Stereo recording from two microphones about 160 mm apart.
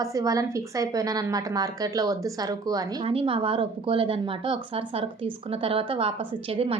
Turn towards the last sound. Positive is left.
turn(degrees=-35)  # may be behind; listen again after turning